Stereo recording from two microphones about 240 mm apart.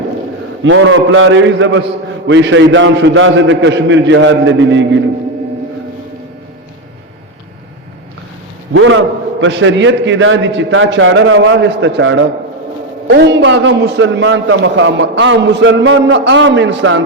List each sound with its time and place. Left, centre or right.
0.6 s a man's voice: right
8.7 s a man's voice: right